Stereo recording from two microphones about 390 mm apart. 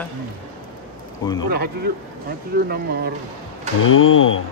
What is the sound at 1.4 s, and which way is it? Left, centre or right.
Speech, right.